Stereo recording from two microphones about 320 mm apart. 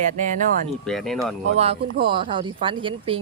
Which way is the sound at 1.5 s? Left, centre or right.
Centre.